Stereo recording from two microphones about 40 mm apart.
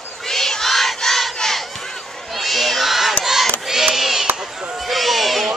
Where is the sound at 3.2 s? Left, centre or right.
Centre.